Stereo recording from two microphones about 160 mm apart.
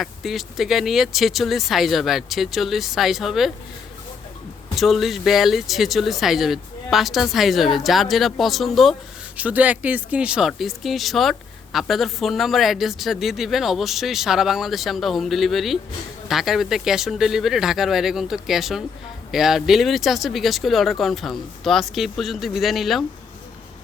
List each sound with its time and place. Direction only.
0.0 s speech: centre (ahead or behind)
4.7 s speech: centre (ahead or behind)